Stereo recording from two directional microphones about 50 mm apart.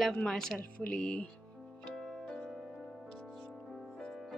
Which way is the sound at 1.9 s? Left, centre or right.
Centre.